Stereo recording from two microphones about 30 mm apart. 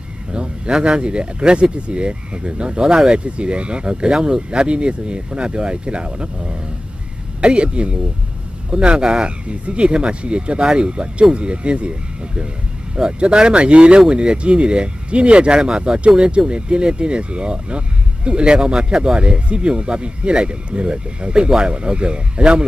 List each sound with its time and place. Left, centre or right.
0.3 s speech: right
4.5 s speech: right
9.5 s speech: right
13.2 s speech: right